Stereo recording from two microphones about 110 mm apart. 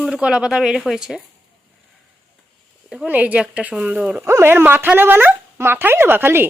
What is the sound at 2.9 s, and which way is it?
A woman's voice, 10° right (ahead or behind).